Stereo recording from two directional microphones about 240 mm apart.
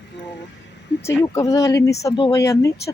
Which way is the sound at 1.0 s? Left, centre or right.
Centre.